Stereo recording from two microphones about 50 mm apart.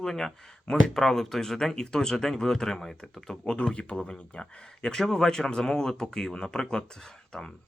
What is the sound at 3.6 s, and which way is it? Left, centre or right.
Speech, left.